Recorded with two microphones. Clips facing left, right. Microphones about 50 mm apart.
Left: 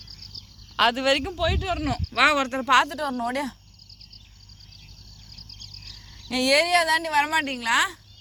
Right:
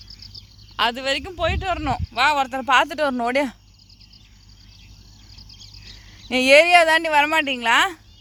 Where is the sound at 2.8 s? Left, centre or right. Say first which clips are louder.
Right 6 dB; right.